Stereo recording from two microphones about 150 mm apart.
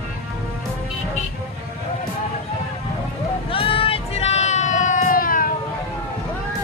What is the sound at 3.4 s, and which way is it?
Vehicle, 40° left (ahead or behind).